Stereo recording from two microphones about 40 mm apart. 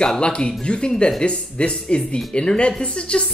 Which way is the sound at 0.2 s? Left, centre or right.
Left.